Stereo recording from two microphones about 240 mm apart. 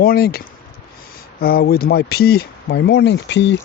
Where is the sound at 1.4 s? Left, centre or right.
Left.